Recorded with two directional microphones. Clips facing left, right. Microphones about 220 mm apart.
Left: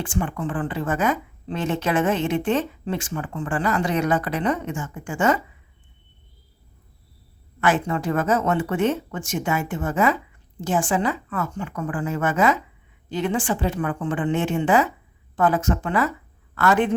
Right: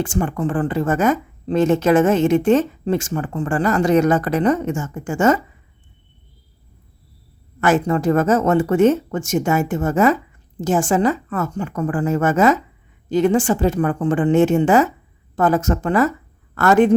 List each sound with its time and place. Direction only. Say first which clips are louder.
0.0 s a woman's voice: right 5 dB; 45° right (ahead or behind)
7.6 s a woman's voice: right 5 dB; 45° right (ahead or behind)